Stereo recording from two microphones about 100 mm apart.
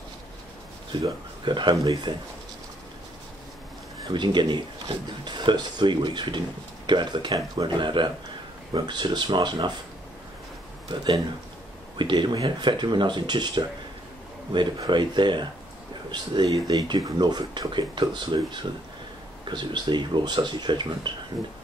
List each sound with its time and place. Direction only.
1.0 s speech: 50° right (ahead or behind)
4.0 s speech: 50° right (ahead or behind)
10.9 s speech: 40° right (ahead or behind)
12.0 s speech: 50° right (ahead or behind)